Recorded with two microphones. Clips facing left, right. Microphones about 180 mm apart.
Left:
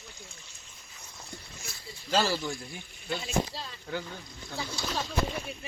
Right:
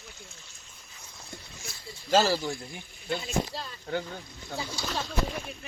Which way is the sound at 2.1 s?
40° right (ahead or behind).